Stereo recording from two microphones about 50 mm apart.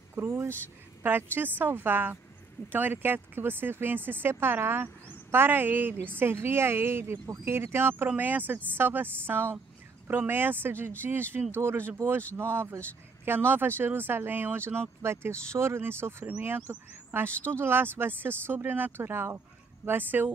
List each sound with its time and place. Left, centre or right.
0.1 s a sound: right
1.0 s speech: right
8.2 s speech: right
15.0 s speech: right
16.3 s speech: right